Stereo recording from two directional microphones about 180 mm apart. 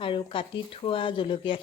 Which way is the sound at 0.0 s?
30° left (ahead or behind).